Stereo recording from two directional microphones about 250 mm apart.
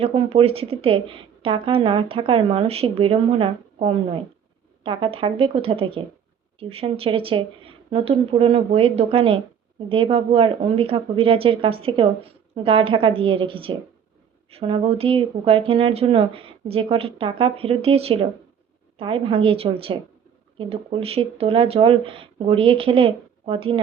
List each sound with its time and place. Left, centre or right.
0.0 s a woman's voice: right